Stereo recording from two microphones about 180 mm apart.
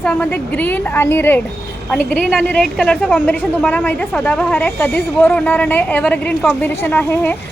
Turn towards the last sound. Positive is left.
turn(degrees=10)  # may be behind; listen again after turning